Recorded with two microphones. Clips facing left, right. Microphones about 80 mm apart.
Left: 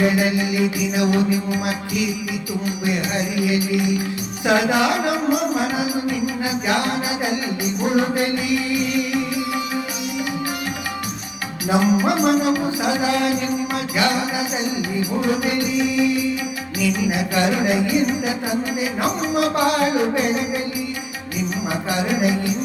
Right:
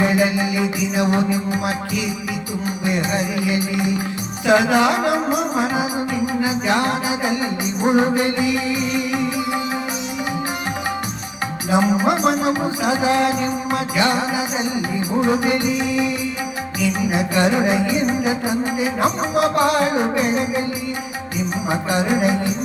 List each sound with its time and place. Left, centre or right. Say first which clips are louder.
0.0 s music: right 1 dB; right
11.7 s music: even; right
21.7 s music: right 4 dB; right